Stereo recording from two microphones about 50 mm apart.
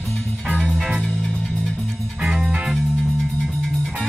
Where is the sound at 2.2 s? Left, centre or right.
Centre.